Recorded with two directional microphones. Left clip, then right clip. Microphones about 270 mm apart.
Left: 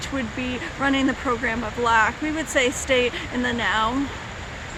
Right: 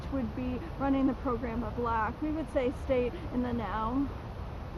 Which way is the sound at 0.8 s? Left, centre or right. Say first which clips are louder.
Left 8 dB; centre.